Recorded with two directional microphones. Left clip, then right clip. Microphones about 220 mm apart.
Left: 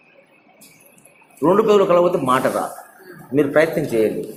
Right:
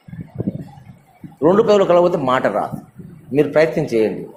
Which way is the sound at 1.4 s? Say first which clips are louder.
Right 1 dB; 45° right (ahead or behind).